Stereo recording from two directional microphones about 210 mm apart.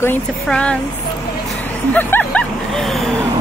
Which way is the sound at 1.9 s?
10° left (ahead or behind).